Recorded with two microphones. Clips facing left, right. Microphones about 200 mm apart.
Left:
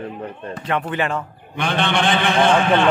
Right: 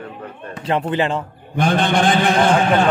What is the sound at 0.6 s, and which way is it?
Speech, 30° right (ahead or behind).